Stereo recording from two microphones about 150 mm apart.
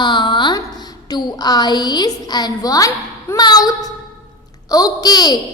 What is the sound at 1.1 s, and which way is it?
A woman's voice, 25° left (ahead or behind).